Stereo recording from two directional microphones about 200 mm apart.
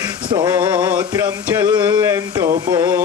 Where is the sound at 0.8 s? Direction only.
10° right (ahead or behind).